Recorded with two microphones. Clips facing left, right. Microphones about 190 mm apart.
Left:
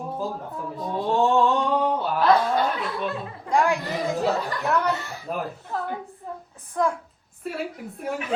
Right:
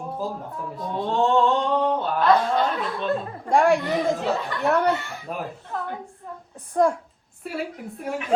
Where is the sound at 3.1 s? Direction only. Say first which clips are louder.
Right 7 dB; 45° right (ahead or behind).